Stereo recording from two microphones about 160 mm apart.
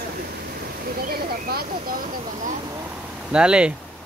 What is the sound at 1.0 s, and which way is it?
Speech, 75° right (ahead or behind).